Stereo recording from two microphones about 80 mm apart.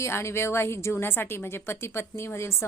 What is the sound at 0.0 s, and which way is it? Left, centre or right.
A woman's voice, left.